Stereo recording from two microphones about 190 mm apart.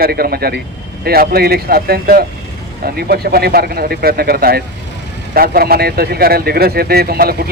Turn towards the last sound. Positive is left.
turn(degrees=-55)  # may be behind; listen again after turning